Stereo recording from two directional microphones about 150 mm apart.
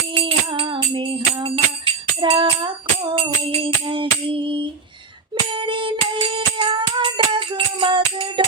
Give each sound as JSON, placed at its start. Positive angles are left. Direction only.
{"t": 0.1, "sound": "music", "side_deg": -35}